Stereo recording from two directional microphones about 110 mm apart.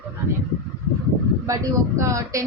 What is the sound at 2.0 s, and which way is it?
Speech, 30° right (ahead or behind).